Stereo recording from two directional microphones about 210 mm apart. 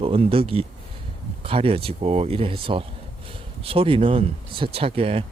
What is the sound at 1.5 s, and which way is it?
Speech, 25° right (ahead or behind).